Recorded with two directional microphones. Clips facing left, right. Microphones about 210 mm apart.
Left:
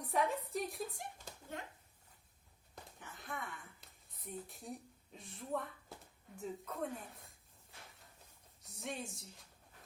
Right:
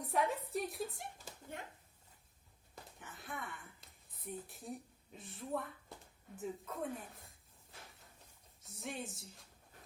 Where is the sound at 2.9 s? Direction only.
Centre (ahead or behind).